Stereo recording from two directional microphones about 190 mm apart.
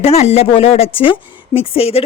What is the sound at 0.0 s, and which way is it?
A woman's voice, 35° left (ahead or behind).